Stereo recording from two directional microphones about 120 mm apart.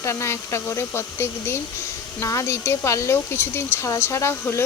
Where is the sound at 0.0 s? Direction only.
20° left (ahead or behind).